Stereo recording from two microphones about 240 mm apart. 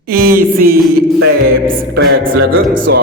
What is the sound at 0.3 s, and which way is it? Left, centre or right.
Music, right.